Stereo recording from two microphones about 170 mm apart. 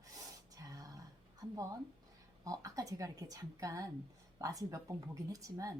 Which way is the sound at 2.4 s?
20° right (ahead or behind).